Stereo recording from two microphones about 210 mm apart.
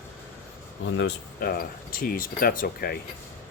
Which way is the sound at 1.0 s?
50° left (ahead or behind).